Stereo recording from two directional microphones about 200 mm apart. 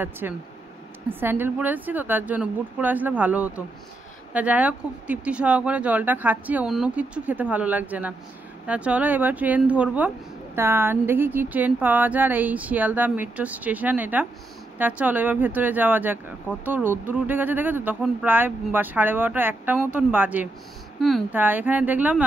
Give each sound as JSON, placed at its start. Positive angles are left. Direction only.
{"t": 0.2, "sound": "speech", "side_deg": -10}